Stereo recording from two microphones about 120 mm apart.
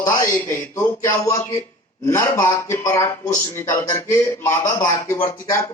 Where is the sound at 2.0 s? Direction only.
20° left (ahead or behind).